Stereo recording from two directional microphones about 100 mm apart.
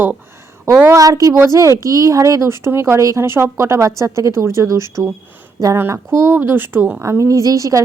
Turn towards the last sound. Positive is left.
turn(degrees=-35)  # may be behind; listen again after turning